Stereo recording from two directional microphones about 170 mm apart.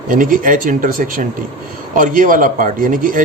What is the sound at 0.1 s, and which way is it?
A man's voice, 50° right (ahead or behind).